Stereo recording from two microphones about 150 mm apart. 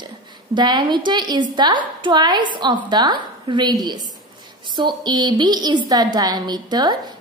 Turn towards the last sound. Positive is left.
turn(degrees=-25)  # may be behind; listen again after turning